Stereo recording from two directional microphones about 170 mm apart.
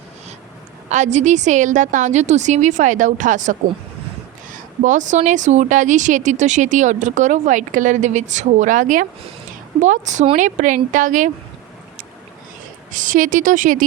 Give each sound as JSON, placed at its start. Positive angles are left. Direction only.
{"t": 0.9, "sound": "a woman's voice", "side_deg": -45}
{"t": 12.9, "sound": "a woman's voice", "side_deg": -50}